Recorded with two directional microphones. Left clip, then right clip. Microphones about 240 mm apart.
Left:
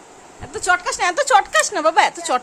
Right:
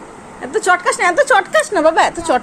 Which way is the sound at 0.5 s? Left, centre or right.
Centre.